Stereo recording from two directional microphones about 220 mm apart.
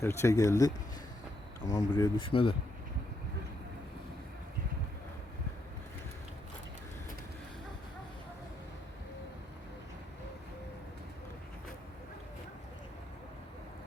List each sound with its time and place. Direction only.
0.0 s speech: 10° left (ahead or behind)